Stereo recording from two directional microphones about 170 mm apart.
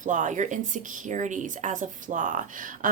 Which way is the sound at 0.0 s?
50° right (ahead or behind).